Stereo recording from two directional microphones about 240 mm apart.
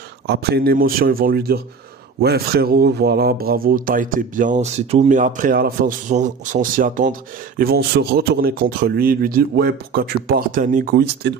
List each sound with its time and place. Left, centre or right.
0.3 s speech: right